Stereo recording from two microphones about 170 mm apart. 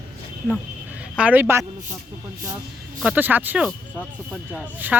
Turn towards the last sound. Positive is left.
turn(degrees=-10)  # may be behind; listen again after turning